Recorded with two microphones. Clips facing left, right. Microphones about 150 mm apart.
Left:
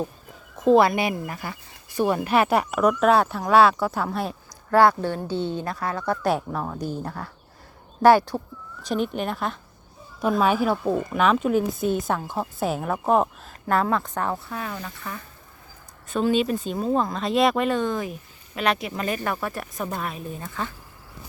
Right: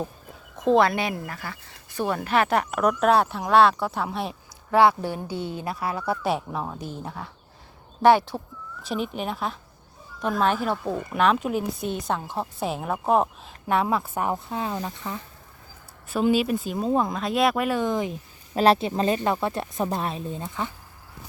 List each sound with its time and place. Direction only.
0.5 s speech: 5° left (ahead or behind); by 15.2 s 20° right (ahead or behind)
16.3 s speech: 5° right (ahead or behind)
18.5 s speech: 30° right (ahead or behind)